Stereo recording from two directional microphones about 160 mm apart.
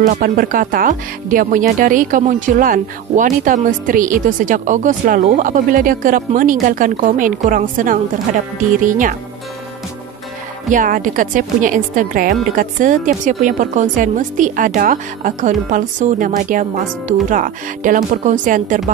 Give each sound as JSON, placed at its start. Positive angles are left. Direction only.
{"t": 0.0, "sound": "speech", "side_deg": -55}
{"t": 10.7, "sound": "a woman's voice", "side_deg": -55}